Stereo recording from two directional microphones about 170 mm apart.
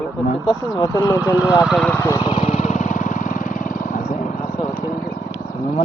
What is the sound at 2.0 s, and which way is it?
Vehicle, 20° left (ahead or behind).